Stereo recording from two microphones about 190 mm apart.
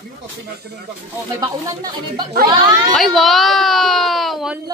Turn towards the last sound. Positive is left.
turn(degrees=0)  # may be behind; listen again after turning